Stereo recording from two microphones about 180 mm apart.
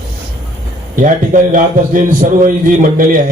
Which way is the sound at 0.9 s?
45° right (ahead or behind).